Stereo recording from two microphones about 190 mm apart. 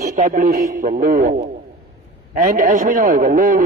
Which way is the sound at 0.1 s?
45° right (ahead or behind).